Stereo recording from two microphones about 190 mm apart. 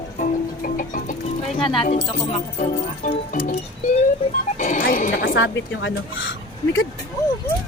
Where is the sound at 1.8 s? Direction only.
35° left (ahead or behind).